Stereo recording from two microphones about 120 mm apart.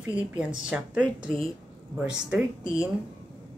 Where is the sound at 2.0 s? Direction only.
10° right (ahead or behind).